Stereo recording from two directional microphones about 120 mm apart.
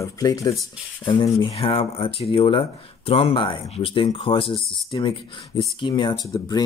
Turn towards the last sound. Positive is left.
turn(degrees=30)  # may be behind; listen again after turning